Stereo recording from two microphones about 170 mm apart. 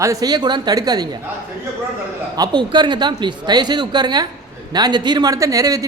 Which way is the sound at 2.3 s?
25° right (ahead or behind).